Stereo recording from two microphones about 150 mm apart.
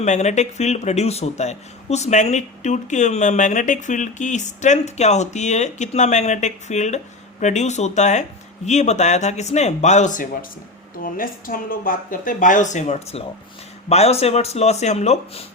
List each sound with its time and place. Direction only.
0.0 s speech: 50° left (ahead or behind)
11.0 s a woman's voice: 70° left (ahead or behind); by 15.4 s 45° left (ahead or behind)